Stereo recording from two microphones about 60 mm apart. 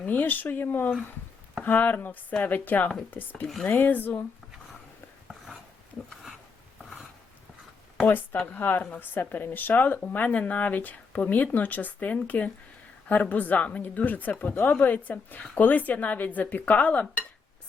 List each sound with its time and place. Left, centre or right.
0.0 s speech: left
8.0 s speech: left